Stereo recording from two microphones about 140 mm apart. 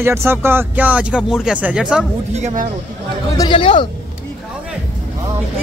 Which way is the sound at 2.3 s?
55° right (ahead or behind).